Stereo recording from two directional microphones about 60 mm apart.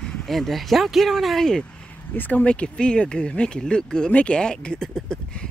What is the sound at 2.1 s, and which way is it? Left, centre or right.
Speech, left.